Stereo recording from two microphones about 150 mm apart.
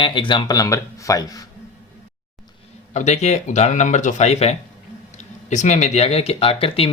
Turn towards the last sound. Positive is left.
turn(degrees=40)  # may be behind; listen again after turning